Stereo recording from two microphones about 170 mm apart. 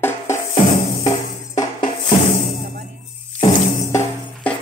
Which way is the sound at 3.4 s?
15° left (ahead or behind).